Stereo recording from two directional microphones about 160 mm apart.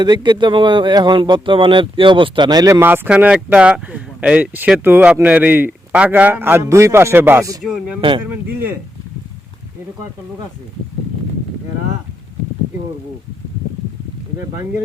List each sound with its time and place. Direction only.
0.0 s speech: 30° right (ahead or behind)
2.8 s speech: 10° right (ahead or behind)
7.6 s speech: centre (ahead or behind)
8.2 s speech: 10° right (ahead or behind)